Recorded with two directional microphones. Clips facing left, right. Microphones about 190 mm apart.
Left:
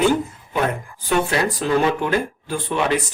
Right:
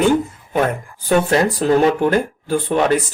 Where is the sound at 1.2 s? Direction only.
40° right (ahead or behind).